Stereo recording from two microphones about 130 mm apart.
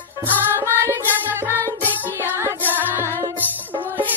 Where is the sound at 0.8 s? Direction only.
15° right (ahead or behind).